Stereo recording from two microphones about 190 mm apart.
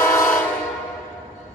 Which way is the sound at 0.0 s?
15° left (ahead or behind).